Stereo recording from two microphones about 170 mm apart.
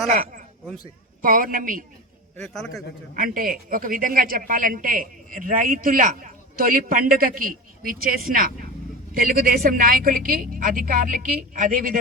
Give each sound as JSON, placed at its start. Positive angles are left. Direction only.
{"t": 0.1, "sound": "a man's voice", "side_deg": -55}
{"t": 2.4, "sound": "a man's voice", "side_deg": 5}
{"t": 3.2, "sound": "speech", "side_deg": -55}